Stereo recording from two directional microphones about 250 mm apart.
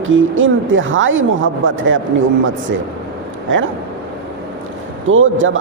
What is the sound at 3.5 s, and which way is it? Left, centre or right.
Speech, right.